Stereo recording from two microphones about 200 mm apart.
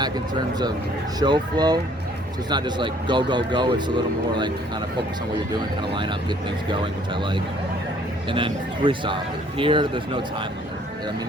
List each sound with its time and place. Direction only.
0.0 s speech: 20° right (ahead or behind)
5.9 s speech: 25° right (ahead or behind)
8.3 s speech: 25° right (ahead or behind)